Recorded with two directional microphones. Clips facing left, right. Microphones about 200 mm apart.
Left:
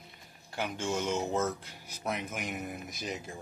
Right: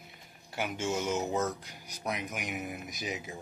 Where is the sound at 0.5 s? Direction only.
5° right (ahead or behind).